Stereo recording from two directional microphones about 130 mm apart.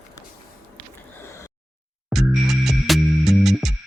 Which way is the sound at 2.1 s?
Centre (ahead or behind).